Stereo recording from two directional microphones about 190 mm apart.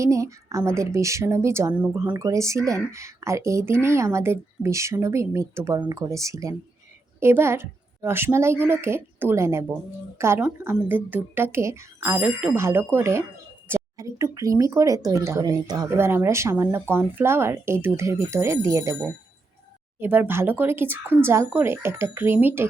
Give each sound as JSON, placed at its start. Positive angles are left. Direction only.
{"t": 0.0, "sound": "a woman's voice", "side_deg": -15}